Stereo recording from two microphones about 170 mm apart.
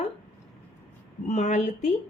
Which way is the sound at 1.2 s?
45° left (ahead or behind).